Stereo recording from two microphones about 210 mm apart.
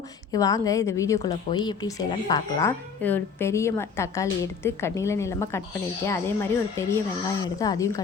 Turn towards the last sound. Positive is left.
turn(degrees=15)  # may be behind; listen again after turning